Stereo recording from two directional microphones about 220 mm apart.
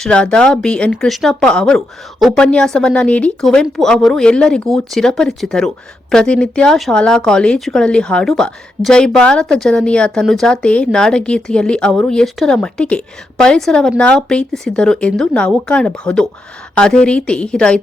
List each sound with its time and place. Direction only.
0.0 s speech: 5° left (ahead or behind)